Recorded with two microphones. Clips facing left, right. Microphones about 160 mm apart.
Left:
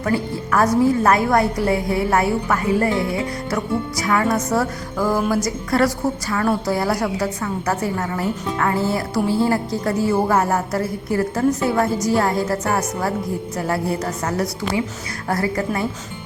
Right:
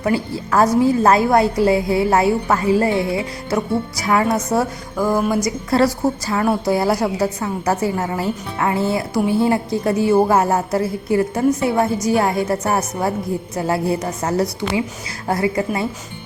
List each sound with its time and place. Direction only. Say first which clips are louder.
0.0 s a woman's voice: right 1 dB; 25° right (ahead or behind)
5.7 s a woman's voice: right 2 dB; 25° right (ahead or behind)